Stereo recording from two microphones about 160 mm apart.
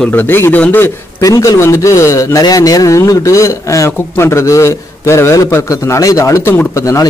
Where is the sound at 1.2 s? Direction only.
20° left (ahead or behind).